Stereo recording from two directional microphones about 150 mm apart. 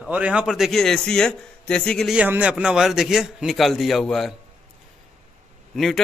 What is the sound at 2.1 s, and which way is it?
Speech, 10° right (ahead or behind).